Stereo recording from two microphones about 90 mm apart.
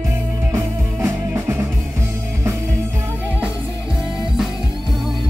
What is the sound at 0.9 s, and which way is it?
Music, 30° right (ahead or behind).